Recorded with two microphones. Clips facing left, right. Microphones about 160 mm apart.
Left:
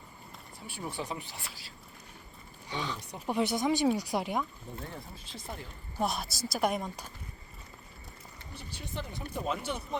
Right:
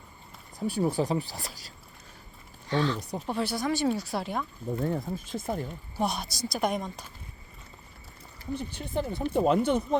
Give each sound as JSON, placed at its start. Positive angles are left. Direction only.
{"t": 0.6, "sound": "speech", "side_deg": -40}
{"t": 2.6, "sound": "speech", "side_deg": 15}
{"t": 3.0, "sound": "speech", "side_deg": -35}
{"t": 3.2, "sound": "speech", "side_deg": 15}
{"t": 4.8, "sound": "speech", "side_deg": -45}
{"t": 6.0, "sound": "a woman's voice", "side_deg": 0}
{"t": 8.5, "sound": "speech", "side_deg": -55}